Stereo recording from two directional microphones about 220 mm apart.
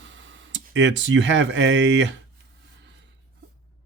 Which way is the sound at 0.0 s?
60° right (ahead or behind).